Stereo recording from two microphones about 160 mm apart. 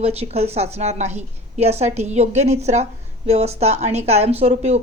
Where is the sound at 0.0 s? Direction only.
40° right (ahead or behind).